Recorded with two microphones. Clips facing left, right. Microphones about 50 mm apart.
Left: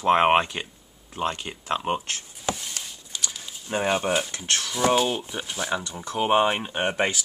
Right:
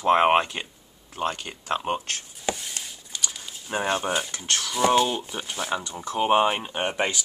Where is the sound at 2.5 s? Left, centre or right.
Centre.